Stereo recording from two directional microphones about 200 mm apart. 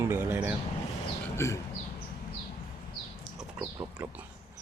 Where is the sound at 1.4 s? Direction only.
15° left (ahead or behind).